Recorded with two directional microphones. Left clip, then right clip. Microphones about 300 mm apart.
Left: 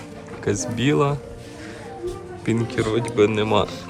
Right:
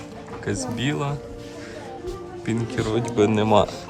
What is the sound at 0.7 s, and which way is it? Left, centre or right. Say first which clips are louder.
Speech: left 9 dB; centre.